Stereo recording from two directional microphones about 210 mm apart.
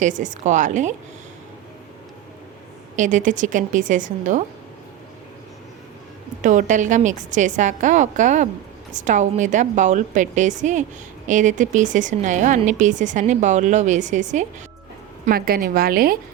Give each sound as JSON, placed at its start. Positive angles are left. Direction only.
{"t": 0.0, "sound": "a woman's voice", "side_deg": -35}
{"t": 2.9, "sound": "a woman's voice", "side_deg": -35}
{"t": 6.4, "sound": "a woman's voice", "side_deg": -35}